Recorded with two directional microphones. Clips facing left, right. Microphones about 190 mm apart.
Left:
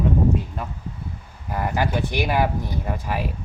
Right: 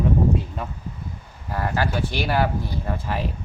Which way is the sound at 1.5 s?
15° left (ahead or behind).